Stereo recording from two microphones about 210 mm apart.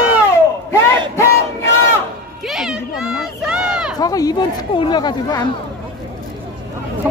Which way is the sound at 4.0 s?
15° left (ahead or behind).